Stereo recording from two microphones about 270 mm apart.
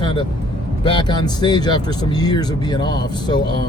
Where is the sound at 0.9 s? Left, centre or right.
Centre.